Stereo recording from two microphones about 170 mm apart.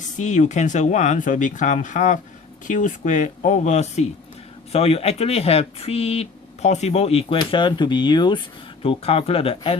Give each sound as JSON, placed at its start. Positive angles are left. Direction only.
{"t": 0.2, "sound": "speech", "side_deg": 45}